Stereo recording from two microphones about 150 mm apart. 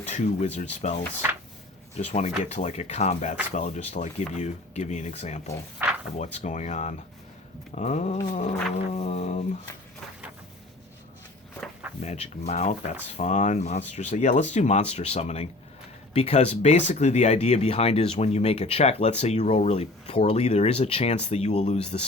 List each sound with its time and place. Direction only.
0.0 s speech: 50° left (ahead or behind)
2.1 s speech: 50° left (ahead or behind)
5.8 s a sound: 15° right (ahead or behind)
6.1 s speech: 50° left (ahead or behind)
8.3 s a sound: 55° left (ahead or behind)
8.9 s speech: 50° left (ahead or behind)
12.0 s speech: 45° left (ahead or behind)